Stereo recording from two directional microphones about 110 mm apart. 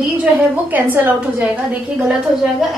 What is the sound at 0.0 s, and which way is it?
A woman's voice, 15° right (ahead or behind).